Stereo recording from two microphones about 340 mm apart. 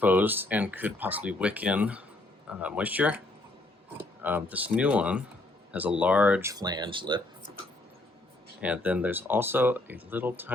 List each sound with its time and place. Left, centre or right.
0.0 s speech: centre
4.2 s speech: centre
8.6 s speech: centre